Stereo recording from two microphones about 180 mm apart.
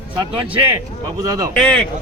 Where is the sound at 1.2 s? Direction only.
20° right (ahead or behind).